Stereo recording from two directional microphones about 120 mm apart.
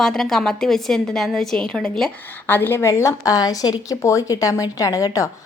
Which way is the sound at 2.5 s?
20° left (ahead or behind).